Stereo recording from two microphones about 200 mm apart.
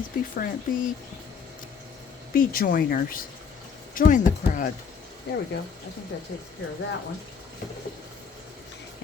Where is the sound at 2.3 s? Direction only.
45° left (ahead or behind).